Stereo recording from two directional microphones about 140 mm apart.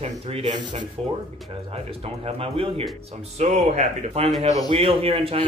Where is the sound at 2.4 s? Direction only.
45° right (ahead or behind).